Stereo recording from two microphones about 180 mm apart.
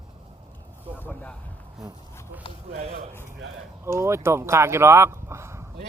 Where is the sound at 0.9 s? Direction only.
10° left (ahead or behind).